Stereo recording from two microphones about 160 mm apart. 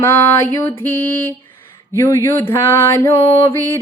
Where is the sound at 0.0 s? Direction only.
15° left (ahead or behind).